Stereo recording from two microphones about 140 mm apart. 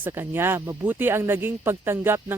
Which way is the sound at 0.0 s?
15° right (ahead or behind).